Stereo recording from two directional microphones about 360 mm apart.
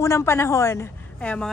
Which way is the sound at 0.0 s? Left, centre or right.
Centre.